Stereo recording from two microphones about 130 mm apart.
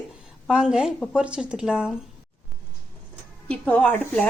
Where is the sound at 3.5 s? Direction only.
10° left (ahead or behind).